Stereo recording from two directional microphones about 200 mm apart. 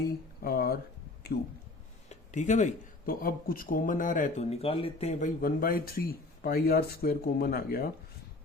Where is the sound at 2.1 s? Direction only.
35° left (ahead or behind).